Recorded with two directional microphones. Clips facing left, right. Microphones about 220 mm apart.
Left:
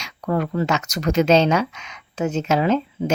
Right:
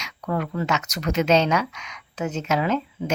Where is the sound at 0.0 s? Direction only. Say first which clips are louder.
Left 4 dB; 35° left (ahead or behind).